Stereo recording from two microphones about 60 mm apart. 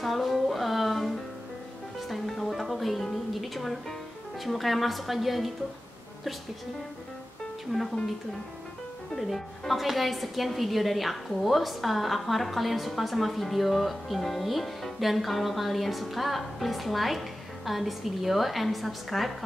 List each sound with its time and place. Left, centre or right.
0.0 s music: centre
4.5 s a woman's voice: centre
7.7 s a woman's voice: centre
9.1 s a woman's voice: centre